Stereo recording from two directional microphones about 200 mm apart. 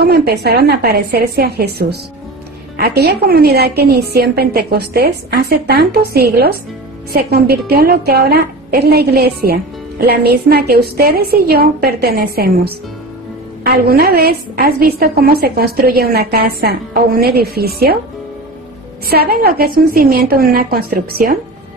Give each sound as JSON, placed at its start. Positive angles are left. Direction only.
{"t": 0.0, "sound": "a woman's voice", "side_deg": -50}
{"t": 19.0, "sound": "a woman's voice", "side_deg": -50}